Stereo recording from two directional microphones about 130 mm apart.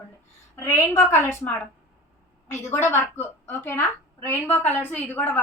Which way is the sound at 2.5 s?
20° left (ahead or behind).